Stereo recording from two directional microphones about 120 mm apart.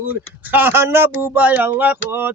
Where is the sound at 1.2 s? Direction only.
15° right (ahead or behind).